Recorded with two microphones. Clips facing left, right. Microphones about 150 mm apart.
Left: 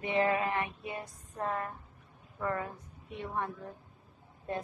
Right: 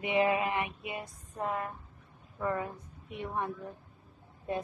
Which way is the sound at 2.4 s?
10° right (ahead or behind).